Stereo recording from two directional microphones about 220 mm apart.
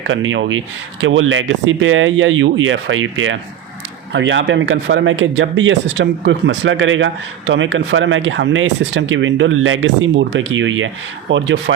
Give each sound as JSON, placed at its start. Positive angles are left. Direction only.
{"t": 0.0, "sound": "speech", "side_deg": -60}